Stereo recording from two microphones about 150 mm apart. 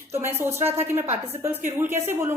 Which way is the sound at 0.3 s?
15° right (ahead or behind).